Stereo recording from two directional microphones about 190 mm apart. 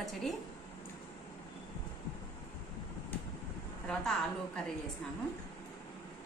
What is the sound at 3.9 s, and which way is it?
Speech, centre (ahead or behind).